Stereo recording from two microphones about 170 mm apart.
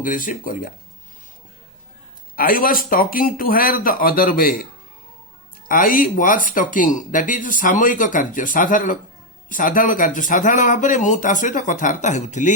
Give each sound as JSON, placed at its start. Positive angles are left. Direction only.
{"t": 0.0, "sound": "speech", "side_deg": 50}
{"t": 2.3, "sound": "speech", "side_deg": 55}
{"t": 5.6, "sound": "speech", "side_deg": 55}